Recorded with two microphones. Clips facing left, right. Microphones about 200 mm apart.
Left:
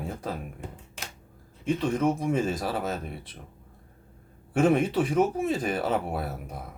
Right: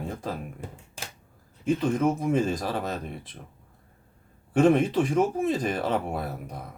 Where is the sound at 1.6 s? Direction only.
Centre (ahead or behind).